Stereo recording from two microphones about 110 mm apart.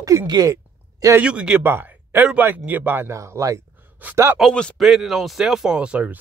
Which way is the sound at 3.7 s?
15° right (ahead or behind).